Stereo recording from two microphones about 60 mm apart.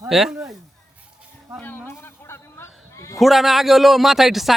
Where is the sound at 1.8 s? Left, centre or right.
Left.